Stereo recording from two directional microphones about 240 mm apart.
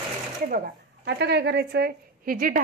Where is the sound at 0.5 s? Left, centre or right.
Right.